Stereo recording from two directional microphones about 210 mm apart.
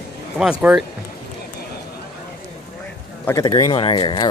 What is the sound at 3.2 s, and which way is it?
Speech, 15° left (ahead or behind).